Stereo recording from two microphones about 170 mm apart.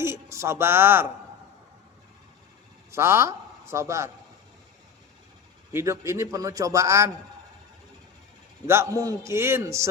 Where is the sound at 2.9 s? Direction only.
15° right (ahead or behind).